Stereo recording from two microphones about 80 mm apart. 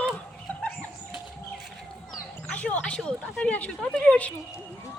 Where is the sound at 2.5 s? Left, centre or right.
Centre.